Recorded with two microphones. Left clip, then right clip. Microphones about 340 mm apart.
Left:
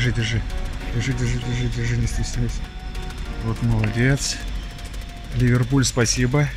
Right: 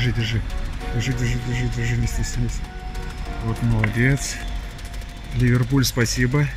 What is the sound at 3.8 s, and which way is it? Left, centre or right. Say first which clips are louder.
Speech: right 1 dB; centre.